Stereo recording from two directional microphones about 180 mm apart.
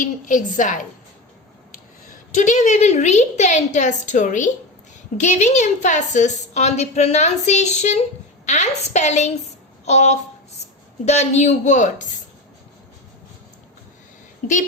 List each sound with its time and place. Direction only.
0.0 s a woman's voice: 45° left (ahead or behind)
2.3 s a woman's voice: 45° left (ahead or behind)
9.8 s a sound: 40° left (ahead or behind)
11.0 s a woman's voice: 40° left (ahead or behind)
14.4 s a woman's voice: 45° left (ahead or behind)